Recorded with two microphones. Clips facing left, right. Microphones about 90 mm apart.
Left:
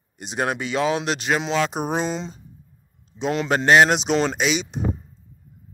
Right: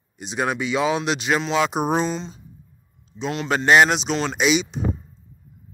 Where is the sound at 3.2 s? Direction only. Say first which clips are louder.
Left 2 dB; 10° left (ahead or behind).